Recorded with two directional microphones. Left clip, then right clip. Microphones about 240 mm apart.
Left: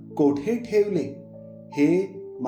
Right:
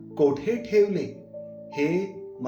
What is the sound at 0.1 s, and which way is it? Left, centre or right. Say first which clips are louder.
Speech: even; left.